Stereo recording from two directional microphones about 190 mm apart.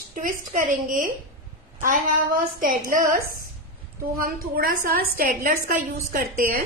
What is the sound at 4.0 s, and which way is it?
Speech, 50° right (ahead or behind).